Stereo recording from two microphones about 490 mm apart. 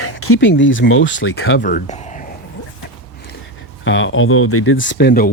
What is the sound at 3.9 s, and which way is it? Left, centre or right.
Speech, left.